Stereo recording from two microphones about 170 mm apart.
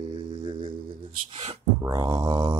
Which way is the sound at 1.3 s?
30° right (ahead or behind).